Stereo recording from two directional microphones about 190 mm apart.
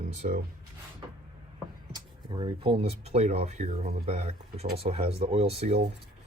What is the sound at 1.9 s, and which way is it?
Speech, 25° right (ahead or behind).